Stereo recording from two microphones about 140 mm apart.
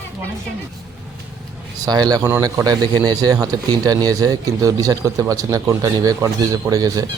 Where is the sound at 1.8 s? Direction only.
30° right (ahead or behind).